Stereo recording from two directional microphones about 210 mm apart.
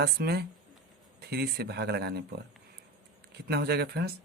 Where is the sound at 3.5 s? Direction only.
50° right (ahead or behind).